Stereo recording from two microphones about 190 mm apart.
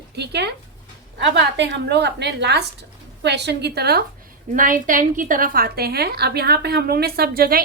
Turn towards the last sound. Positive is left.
turn(degrees=-50)  # may be behind; listen again after turning